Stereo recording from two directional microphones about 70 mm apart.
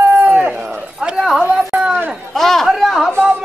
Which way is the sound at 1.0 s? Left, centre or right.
Centre.